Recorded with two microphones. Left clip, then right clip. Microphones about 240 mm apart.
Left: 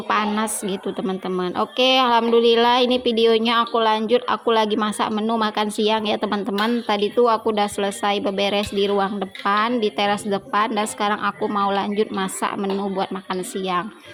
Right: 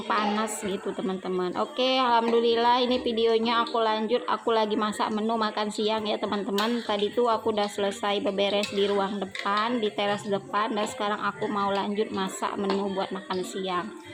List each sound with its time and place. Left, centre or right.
0.1 s a woman's voice: left